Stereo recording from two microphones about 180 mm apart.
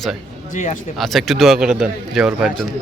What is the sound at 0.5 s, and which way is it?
Speech, 40° left (ahead or behind).